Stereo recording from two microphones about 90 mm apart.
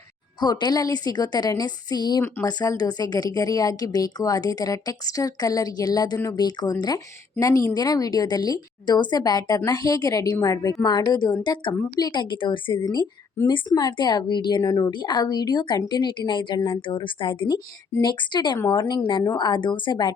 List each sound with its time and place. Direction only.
0.3 s a woman's voice: 50° left (ahead or behind)
11.1 s a woman's voice: 50° left (ahead or behind)
14.6 s a woman's voice: 45° left (ahead or behind)